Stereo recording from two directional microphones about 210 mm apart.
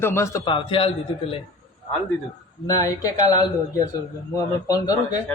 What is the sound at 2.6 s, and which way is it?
Speech, 15° left (ahead or behind).